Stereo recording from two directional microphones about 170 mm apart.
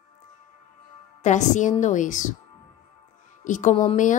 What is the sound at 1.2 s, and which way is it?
A woman's voice, 45° left (ahead or behind).